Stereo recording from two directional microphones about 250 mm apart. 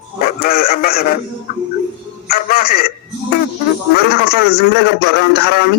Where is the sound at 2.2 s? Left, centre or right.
Left.